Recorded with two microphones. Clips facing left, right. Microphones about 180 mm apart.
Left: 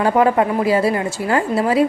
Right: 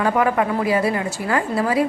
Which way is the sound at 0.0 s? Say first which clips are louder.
Left 4 dB; 30° left (ahead or behind).